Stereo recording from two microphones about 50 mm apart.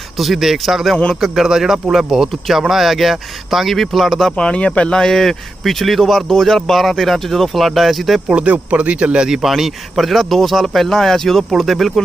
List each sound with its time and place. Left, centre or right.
0.2 s speech: centre
4.4 s speech: left
4.9 s speech: centre
8.3 s speech: right; by 12.0 s centre